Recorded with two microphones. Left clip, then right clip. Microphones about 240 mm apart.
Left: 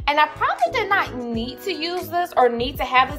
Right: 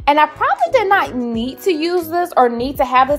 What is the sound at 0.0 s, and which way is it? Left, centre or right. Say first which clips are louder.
A child's voice: right 5 dB; right.